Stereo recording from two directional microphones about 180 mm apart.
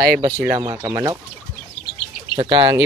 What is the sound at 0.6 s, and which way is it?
Speech, 20° right (ahead or behind).